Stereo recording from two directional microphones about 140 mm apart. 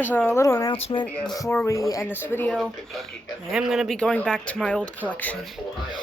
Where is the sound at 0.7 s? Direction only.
40° left (ahead or behind).